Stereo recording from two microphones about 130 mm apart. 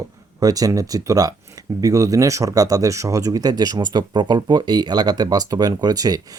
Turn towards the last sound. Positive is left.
turn(degrees=-30)  # may be behind; listen again after turning